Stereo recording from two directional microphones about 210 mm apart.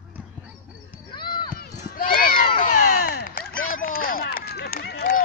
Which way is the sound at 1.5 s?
45° left (ahead or behind).